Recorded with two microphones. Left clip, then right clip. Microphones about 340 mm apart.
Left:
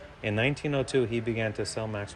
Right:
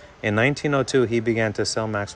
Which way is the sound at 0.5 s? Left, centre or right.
Centre.